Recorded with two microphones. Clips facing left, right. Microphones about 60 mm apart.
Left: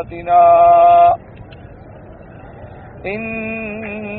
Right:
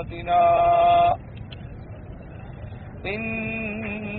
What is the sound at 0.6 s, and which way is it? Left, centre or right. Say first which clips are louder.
Speech: left 9 dB; left.